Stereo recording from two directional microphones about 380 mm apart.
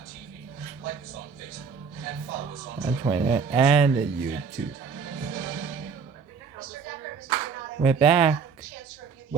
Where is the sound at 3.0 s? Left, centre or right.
Centre.